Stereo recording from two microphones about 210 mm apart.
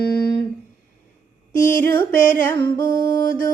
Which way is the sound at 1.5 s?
40° left (ahead or behind).